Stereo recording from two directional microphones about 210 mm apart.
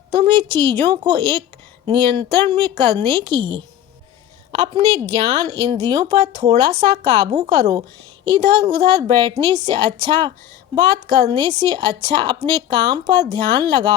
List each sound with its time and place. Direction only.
0.1 s a woman's voice: 20° right (ahead or behind)